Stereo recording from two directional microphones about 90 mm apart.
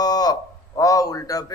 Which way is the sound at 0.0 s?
45° left (ahead or behind).